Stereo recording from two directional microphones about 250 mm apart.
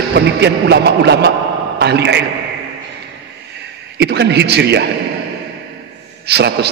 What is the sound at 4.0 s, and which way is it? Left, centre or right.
Speech, right.